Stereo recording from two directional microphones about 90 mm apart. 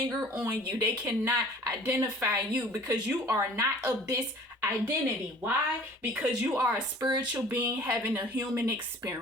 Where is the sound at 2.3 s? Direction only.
20° right (ahead or behind).